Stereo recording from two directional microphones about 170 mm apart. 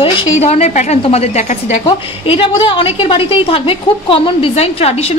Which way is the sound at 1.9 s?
30° left (ahead or behind).